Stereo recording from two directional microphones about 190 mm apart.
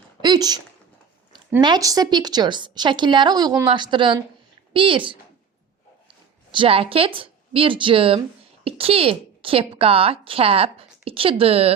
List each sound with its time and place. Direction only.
0.2 s a sound: 20° right (ahead or behind)
1.6 s a woman's voice: 20° right (ahead or behind)
6.5 s a woman's voice: 30° right (ahead or behind)